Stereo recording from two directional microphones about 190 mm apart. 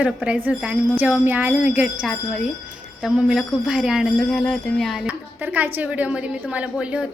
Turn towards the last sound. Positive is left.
turn(degrees=-5)  # may be behind; listen again after turning